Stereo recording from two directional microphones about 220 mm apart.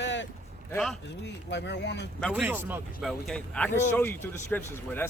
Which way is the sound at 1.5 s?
50° left (ahead or behind).